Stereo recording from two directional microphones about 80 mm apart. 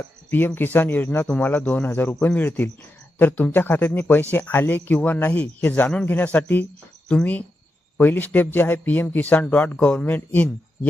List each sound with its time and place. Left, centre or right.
0.3 s speech: left